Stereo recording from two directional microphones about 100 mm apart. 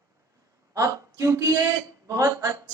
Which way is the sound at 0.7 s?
30° right (ahead or behind).